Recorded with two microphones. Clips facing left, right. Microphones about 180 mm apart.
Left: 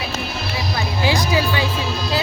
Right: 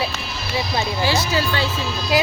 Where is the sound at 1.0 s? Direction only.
15° left (ahead or behind).